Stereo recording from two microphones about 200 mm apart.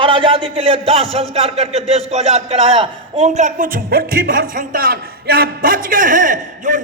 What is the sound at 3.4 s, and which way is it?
A man's voice, 40° right (ahead or behind).